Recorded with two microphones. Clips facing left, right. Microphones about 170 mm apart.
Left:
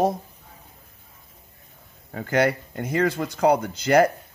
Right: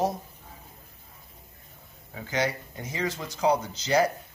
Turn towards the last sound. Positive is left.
turn(degrees=55)  # may be behind; listen again after turning